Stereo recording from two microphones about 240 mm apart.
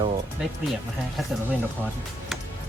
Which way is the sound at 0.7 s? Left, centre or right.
Centre.